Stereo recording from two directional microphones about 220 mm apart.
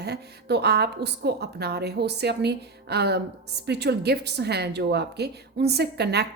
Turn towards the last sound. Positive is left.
turn(degrees=-50)  # may be behind; listen again after turning